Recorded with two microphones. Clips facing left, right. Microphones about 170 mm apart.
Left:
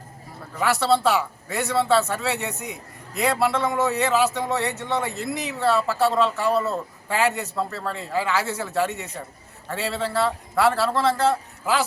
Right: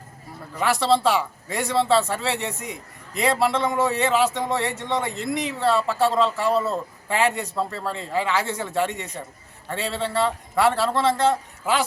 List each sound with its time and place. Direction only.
0.6 s speech: 5° left (ahead or behind)